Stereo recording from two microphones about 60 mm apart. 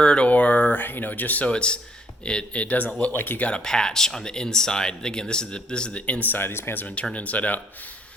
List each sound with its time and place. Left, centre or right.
0.0 s speech: centre
3.5 s speech: centre; by 6.8 s left
6.8 s speech: left